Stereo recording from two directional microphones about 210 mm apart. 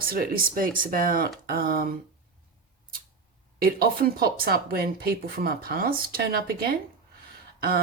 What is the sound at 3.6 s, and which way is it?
Speech, 45° right (ahead or behind).